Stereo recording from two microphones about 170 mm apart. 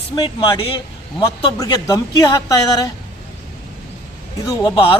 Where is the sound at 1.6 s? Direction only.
20° left (ahead or behind).